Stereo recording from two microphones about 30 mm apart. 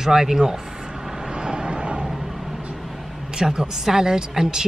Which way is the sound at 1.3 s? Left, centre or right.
Right.